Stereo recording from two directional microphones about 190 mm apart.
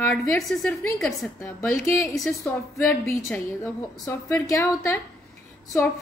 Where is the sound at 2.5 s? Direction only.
10° left (ahead or behind).